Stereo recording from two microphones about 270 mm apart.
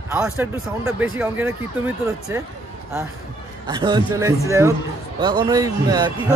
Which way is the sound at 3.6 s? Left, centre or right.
Centre.